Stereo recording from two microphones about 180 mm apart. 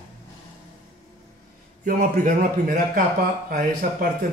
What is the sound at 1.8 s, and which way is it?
A man's voice, 50° right (ahead or behind).